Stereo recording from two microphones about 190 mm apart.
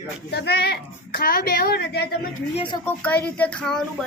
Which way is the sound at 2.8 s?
10° left (ahead or behind).